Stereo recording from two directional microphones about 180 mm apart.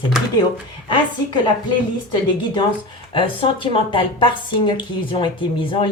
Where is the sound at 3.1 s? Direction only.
30° left (ahead or behind).